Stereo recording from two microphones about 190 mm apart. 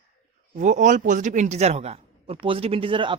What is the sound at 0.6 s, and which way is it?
Speech, 40° right (ahead or behind).